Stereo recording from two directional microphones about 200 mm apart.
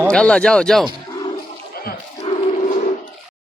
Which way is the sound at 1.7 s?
50° left (ahead or behind).